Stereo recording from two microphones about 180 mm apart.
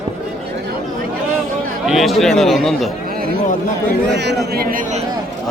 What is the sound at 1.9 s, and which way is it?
A man's voice, centre (ahead or behind).